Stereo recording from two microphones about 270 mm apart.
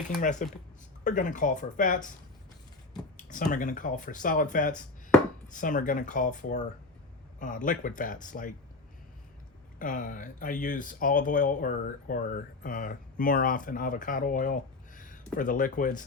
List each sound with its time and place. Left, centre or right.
0.2 s speech: left
3.5 s speech: left
9.7 s speech: left